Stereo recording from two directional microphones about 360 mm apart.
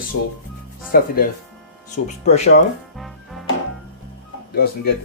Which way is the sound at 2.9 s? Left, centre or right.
Centre.